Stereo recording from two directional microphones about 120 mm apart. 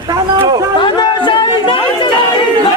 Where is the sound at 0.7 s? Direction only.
40° left (ahead or behind).